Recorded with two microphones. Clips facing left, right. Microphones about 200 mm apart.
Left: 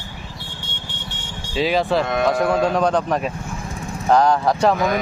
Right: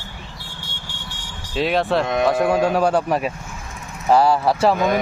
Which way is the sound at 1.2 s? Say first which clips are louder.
Left 3 dB; 30° left (ahead or behind).